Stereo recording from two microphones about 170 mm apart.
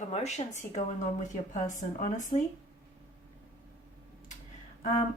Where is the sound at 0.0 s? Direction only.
40° left (ahead or behind).